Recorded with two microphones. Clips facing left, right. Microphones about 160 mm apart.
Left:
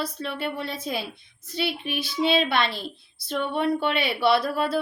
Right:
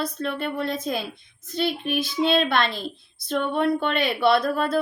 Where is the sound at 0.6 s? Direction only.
50° right (ahead or behind).